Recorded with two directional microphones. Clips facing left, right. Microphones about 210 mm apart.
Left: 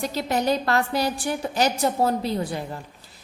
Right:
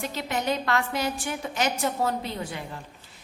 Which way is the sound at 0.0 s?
35° left (ahead or behind).